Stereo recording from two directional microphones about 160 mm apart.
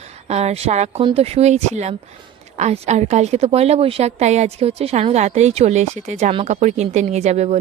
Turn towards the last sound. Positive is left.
turn(degrees=-45)  # may be behind; listen again after turning